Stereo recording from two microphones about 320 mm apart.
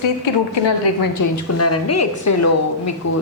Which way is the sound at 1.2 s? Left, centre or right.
Left.